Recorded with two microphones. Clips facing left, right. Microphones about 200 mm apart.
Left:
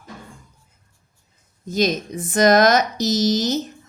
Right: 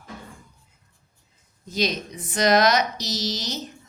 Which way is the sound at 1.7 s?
50° left (ahead or behind).